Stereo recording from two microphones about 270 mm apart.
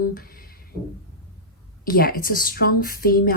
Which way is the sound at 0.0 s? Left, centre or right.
Left.